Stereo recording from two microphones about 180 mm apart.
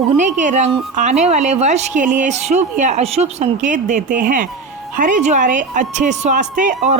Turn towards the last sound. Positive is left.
turn(degrees=-45)  # may be behind; listen again after turning